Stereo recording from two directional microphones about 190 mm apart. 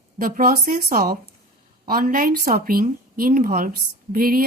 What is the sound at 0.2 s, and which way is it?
A woman's voice, 45° right (ahead or behind).